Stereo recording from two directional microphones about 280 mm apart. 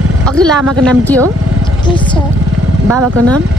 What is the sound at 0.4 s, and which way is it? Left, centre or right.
Speech, centre.